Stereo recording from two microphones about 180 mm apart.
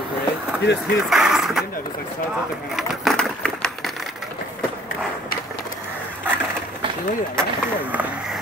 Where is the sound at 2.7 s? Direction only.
Centre (ahead or behind).